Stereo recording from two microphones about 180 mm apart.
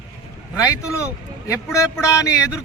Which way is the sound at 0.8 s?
15° left (ahead or behind).